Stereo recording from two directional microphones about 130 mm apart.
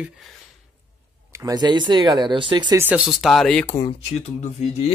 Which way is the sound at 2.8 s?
10° right (ahead or behind).